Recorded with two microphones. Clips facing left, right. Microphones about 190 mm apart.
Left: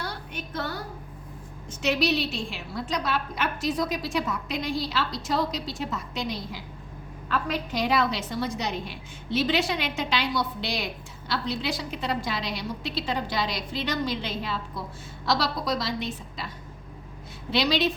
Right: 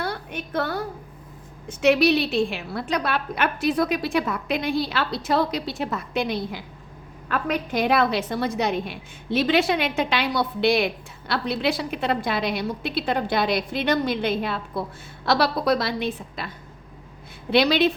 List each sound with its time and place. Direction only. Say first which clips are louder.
0.0 s a sound: right 6 dB; 55° right (ahead or behind)
1.6 s a woman's voice: right 7 dB; 60° right (ahead or behind)
17.5 s a woman's voice: right 6 dB; 55° right (ahead or behind)